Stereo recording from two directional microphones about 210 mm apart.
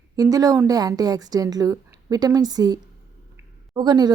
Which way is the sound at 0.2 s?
15° right (ahead or behind).